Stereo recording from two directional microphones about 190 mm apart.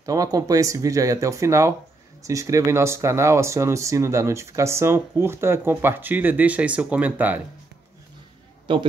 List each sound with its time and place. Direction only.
0.0 s speech: 20° right (ahead or behind)
8.7 s a man's voice: 25° right (ahead or behind)